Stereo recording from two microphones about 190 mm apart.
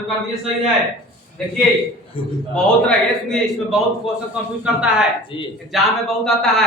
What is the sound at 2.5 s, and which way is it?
A man's voice, 5° left (ahead or behind).